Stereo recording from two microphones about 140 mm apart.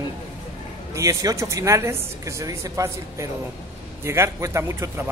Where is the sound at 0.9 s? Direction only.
20° right (ahead or behind).